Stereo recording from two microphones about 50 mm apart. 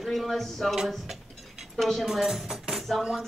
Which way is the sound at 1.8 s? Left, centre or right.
Centre.